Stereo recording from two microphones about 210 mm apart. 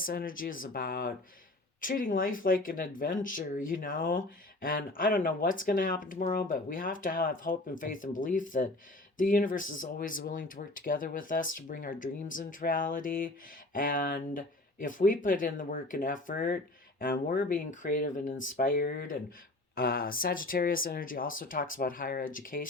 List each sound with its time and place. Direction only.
0.0 s speech: 45° left (ahead or behind)